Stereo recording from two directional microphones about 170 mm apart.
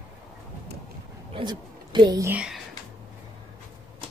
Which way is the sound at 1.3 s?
25° right (ahead or behind).